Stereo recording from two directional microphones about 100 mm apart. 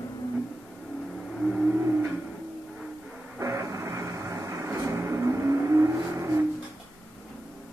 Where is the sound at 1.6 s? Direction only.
20° right (ahead or behind).